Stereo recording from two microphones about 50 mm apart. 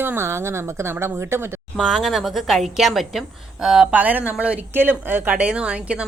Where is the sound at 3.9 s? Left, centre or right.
Right.